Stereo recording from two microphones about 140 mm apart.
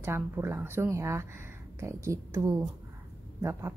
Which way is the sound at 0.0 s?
20° right (ahead or behind).